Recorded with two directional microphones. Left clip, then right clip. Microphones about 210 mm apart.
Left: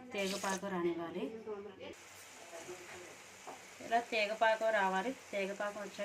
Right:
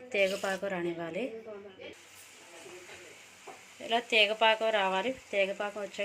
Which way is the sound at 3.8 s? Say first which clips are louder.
Right 7 dB; 20° right (ahead or behind).